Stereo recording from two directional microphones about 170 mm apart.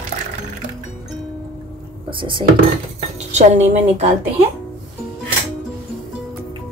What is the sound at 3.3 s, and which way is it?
Speech, 40° right (ahead or behind).